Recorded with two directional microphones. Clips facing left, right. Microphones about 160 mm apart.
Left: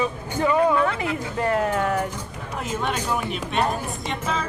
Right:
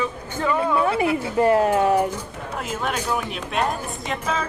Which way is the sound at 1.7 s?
15° right (ahead or behind).